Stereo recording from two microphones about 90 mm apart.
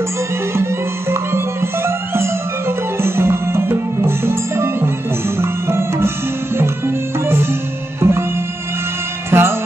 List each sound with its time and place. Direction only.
1.1 s music: 30° right (ahead or behind)
8.0 s music: 30° right (ahead or behind)
9.3 s music: 25° right (ahead or behind)